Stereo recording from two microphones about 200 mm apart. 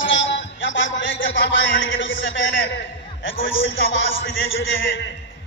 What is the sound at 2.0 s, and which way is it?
A man's voice, 70° left (ahead or behind).